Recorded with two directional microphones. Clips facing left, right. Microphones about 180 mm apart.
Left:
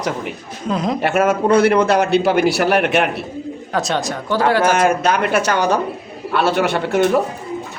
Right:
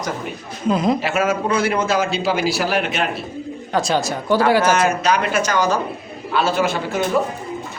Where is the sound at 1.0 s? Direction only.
55° left (ahead or behind).